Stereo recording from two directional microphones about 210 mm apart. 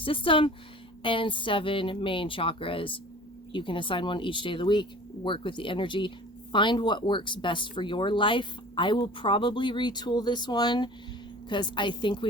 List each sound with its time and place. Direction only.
0.0 s speech: 25° left (ahead or behind)